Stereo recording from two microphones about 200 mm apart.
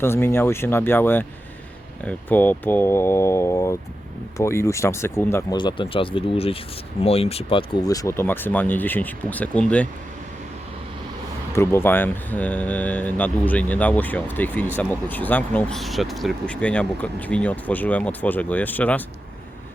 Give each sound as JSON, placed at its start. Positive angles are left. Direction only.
{"t": 0.0, "sound": "speech", "side_deg": 10}
{"t": 5.5, "sound": "speech", "side_deg": 25}
{"t": 11.5, "sound": "speech", "side_deg": 10}